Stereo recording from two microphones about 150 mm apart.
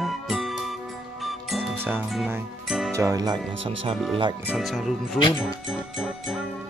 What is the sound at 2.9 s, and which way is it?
Speech, 25° right (ahead or behind).